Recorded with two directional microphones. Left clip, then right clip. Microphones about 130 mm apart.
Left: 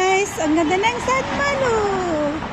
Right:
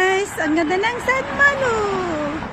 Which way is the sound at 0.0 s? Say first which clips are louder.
Even; centre (ahead or behind).